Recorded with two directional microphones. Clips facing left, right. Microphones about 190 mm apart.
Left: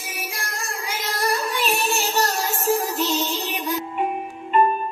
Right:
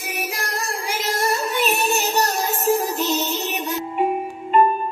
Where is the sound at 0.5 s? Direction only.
35° right (ahead or behind).